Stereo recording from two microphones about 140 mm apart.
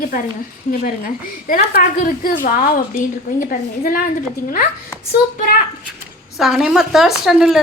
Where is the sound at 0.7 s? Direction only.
90° left.